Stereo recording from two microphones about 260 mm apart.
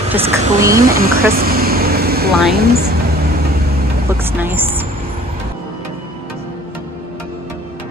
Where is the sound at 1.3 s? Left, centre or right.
Right.